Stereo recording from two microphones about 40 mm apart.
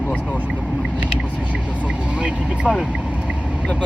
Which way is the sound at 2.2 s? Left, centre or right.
Right.